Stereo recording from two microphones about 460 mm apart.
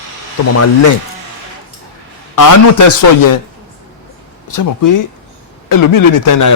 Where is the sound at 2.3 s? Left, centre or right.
Left.